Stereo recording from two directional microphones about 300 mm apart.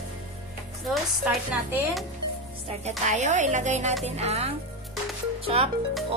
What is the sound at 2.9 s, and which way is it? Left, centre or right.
Speech, right.